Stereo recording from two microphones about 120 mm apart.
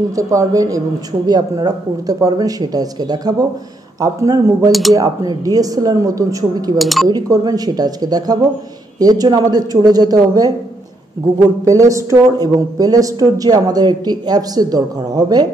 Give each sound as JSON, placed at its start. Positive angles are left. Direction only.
{"t": 0.1, "sound": "a woman's voice", "side_deg": -25}
{"t": 6.8, "sound": "speech", "side_deg": 0}
{"t": 7.1, "sound": "a woman's voice", "side_deg": -35}
{"t": 11.6, "sound": "a woman's voice", "side_deg": -30}